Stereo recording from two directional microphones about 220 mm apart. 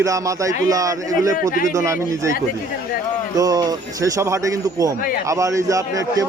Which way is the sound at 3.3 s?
15° right (ahead or behind).